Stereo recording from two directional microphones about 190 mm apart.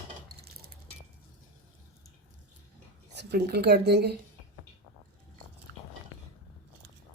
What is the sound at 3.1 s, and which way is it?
A woman's voice, 60° right (ahead or behind).